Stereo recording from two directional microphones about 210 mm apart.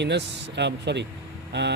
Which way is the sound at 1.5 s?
55° right (ahead or behind).